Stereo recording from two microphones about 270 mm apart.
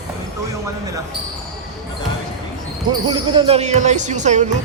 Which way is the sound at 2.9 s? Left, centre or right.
Centre.